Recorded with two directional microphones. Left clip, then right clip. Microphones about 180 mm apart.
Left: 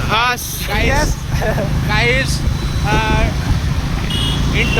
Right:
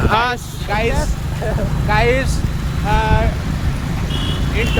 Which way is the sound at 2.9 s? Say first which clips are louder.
Left 1 dB; 25° right (ahead or behind).